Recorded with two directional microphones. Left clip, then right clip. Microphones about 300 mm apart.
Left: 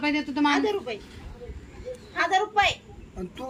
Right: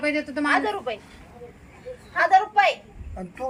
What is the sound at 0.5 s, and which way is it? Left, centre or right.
Speech, centre.